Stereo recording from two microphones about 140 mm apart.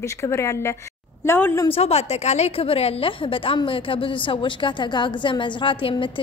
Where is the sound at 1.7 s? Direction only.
50° left (ahead or behind).